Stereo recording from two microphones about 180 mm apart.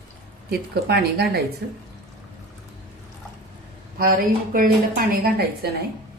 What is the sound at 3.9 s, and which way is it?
A woman's voice, 55° right (ahead or behind).